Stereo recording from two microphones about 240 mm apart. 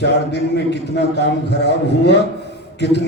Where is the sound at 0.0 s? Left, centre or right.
Left.